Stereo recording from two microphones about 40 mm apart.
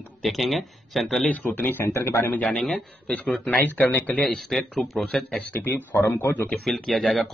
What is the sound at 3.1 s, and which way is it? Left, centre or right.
Speech, left.